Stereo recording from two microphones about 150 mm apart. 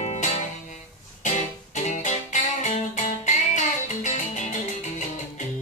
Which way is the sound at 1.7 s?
55° left (ahead or behind).